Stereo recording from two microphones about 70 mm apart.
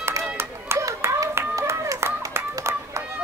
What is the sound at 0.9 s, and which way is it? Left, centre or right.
Clapping, right.